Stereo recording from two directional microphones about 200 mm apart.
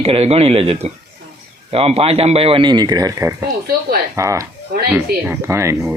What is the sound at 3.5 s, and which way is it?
Speech, 50° right (ahead or behind).